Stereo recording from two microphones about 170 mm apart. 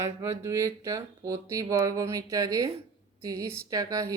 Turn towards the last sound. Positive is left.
turn(degrees=-20)  # may be behind; listen again after turning